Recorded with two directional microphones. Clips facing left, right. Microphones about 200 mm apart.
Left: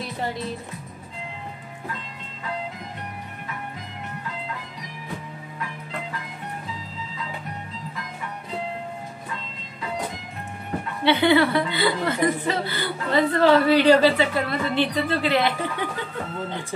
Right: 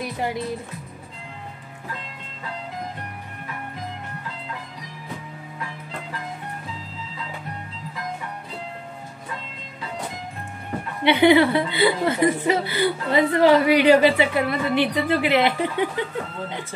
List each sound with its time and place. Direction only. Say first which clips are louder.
0.0 s music: right 2 dB; 15° right (ahead or behind)
11.1 s a woman's voice: right 3 dB; 20° right (ahead or behind)